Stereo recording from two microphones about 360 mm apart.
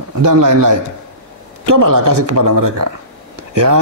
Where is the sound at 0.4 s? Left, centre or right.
Right.